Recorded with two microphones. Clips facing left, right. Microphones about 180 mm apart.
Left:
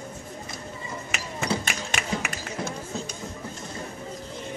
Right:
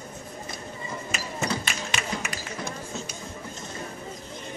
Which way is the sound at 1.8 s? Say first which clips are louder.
Left 2 dB; 55° left (ahead or behind).